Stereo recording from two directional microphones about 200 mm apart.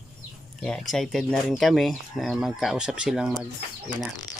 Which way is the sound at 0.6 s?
Centre (ahead or behind).